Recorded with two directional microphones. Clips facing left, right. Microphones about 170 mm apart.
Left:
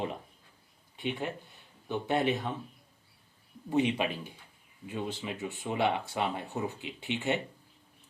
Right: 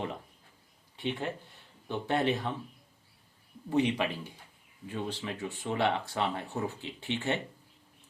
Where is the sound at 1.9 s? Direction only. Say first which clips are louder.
Even; 15° left (ahead or behind).